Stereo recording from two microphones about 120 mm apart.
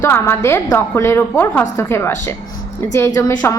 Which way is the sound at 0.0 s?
20° left (ahead or behind).